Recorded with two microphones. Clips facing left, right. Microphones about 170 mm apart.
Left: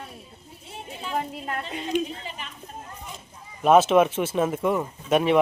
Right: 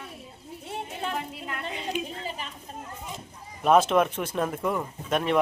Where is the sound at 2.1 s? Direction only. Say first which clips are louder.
Right 1 dB; 40° right (ahead or behind).